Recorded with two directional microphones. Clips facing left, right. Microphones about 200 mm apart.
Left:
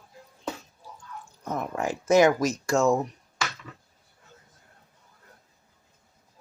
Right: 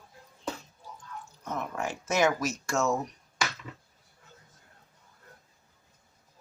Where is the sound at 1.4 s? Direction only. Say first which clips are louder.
Left 4 dB; 35° left (ahead or behind).